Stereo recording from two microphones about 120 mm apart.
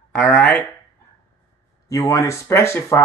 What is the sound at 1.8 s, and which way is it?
Speech, 25° left (ahead or behind).